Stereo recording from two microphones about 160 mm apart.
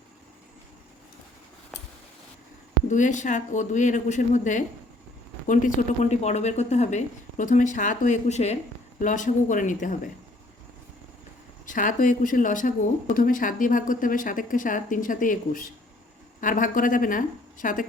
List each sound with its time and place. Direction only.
2.9 s a woman's voice: 50° left (ahead or behind)
11.6 s speech: 55° left (ahead or behind)